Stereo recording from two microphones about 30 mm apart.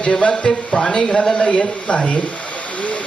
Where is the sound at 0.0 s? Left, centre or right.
Left.